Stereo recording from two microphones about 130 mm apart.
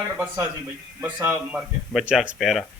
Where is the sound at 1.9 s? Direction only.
5° right (ahead or behind).